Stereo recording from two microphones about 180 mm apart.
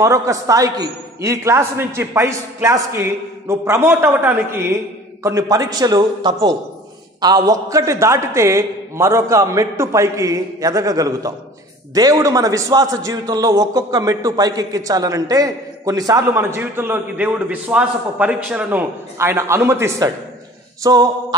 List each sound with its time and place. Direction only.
0.0 s a man's voice: 15° right (ahead or behind)